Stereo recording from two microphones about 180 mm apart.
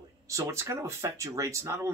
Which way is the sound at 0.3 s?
15° right (ahead or behind).